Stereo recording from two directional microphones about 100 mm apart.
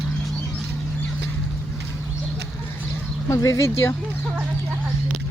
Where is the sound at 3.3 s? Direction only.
35° left (ahead or behind).